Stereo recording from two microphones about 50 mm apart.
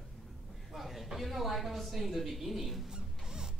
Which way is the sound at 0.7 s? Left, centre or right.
Centre.